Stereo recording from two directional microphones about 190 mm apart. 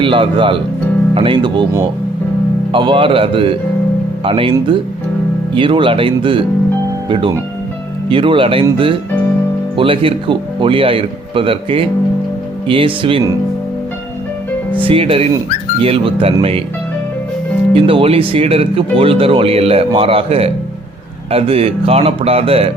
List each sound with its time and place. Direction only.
0.0 s speech: 25° right (ahead or behind)
5.5 s speech: 25° right (ahead or behind)
14.8 s speech: 30° right (ahead or behind)
17.7 s speech: 30° right (ahead or behind)